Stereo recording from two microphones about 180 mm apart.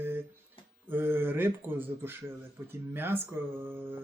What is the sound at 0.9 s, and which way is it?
Speech, 10° right (ahead or behind).